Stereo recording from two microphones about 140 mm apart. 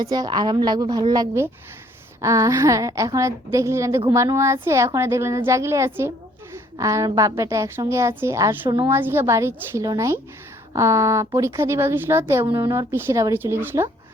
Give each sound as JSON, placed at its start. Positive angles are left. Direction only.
{"t": 0.1, "sound": "a woman's voice", "side_deg": -30}